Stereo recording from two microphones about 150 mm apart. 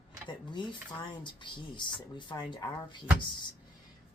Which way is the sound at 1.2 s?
30° left (ahead or behind).